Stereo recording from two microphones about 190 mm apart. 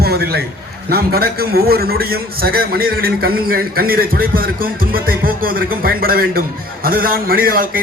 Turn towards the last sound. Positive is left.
turn(degrees=-50)  # may be behind; listen again after turning